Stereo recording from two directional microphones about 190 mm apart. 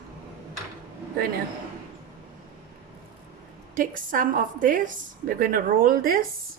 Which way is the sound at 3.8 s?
45° right (ahead or behind).